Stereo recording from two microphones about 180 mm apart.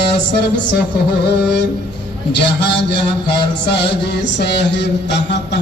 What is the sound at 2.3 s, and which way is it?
Mantra, 70° left (ahead or behind).